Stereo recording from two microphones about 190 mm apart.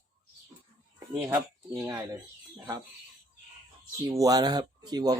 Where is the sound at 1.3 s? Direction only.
15° right (ahead or behind).